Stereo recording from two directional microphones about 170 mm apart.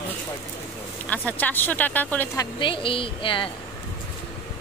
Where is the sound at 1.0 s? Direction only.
10° left (ahead or behind).